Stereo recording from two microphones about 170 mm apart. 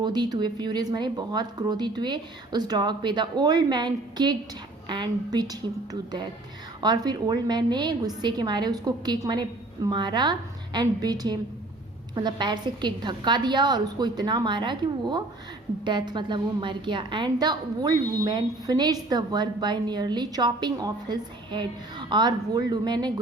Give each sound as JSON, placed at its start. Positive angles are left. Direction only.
{"t": 0.0, "sound": "a woman's voice", "side_deg": -25}